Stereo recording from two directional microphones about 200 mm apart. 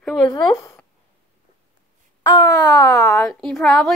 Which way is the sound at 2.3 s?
20° left (ahead or behind).